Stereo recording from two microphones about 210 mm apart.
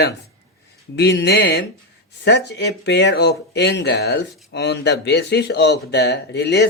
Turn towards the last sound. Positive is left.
turn(degrees=55)  # may be behind; listen again after turning